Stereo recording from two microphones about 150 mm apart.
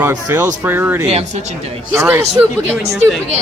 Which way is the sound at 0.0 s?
20° right (ahead or behind).